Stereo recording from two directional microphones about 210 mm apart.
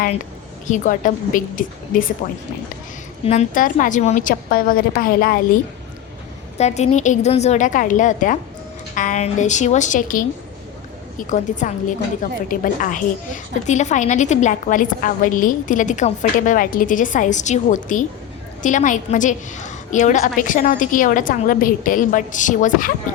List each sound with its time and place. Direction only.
0.7 s a woman's voice: 40° left (ahead or behind)
3.2 s a woman's voice: 35° left (ahead or behind)
6.6 s a woman's voice: 30° left (ahead or behind)